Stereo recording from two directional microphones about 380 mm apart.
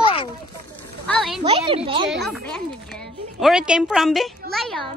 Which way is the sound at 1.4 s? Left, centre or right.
Centre.